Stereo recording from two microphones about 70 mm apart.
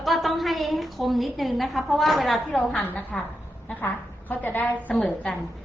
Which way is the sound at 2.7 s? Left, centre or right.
Centre.